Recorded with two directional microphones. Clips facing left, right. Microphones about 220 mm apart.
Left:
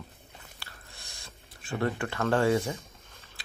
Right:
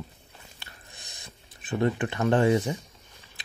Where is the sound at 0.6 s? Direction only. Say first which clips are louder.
Even; 20° right (ahead or behind).